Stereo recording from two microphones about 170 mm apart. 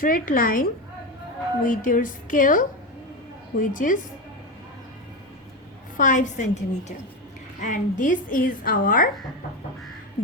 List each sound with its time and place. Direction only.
0.0 s a woman's voice: 55° left (ahead or behind)
6.0 s a woman's voice: 50° left (ahead or behind)